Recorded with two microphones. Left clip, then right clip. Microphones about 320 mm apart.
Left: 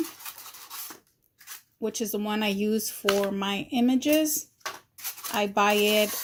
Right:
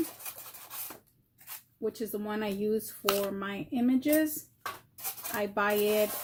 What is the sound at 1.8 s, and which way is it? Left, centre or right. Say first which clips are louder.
Speech: left 4 dB; left.